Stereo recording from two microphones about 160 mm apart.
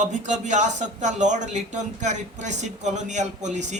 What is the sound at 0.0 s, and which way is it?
A man's voice, 50° right (ahead or behind).